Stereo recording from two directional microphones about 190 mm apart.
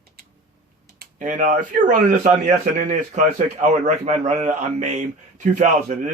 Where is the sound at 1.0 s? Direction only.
45° right (ahead or behind).